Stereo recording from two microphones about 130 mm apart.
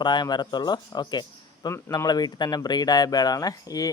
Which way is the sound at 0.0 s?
35° left (ahead or behind).